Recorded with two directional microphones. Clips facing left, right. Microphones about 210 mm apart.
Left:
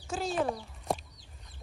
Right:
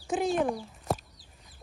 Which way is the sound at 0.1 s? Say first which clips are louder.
Right 6 dB; 20° right (ahead or behind).